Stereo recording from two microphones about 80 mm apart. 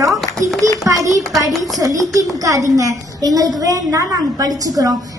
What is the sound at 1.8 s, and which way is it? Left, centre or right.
A woman's voice, right.